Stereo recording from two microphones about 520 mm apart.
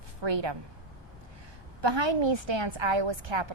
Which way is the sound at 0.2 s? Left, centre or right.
Right.